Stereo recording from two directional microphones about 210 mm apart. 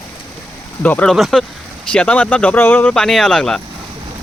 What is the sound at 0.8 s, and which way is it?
Speech, 5° left (ahead or behind).